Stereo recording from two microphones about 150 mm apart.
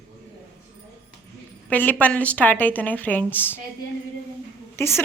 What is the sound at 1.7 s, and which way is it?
A woman's voice, 10° left (ahead or behind).